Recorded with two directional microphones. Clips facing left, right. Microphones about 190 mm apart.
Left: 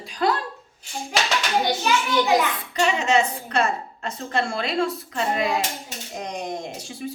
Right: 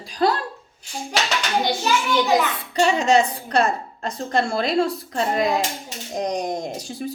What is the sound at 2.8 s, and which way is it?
A woman's voice, 35° right (ahead or behind).